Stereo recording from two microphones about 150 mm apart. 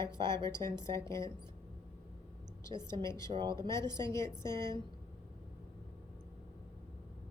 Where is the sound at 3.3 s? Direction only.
30° right (ahead or behind).